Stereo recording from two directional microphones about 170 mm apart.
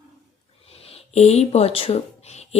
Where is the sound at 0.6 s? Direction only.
35° left (ahead or behind).